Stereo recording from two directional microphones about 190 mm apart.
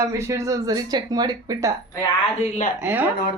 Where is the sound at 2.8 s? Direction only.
10° right (ahead or behind).